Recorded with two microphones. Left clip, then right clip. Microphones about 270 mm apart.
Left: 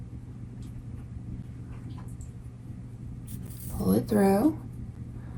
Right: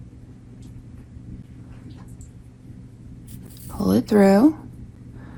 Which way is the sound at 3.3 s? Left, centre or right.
Centre.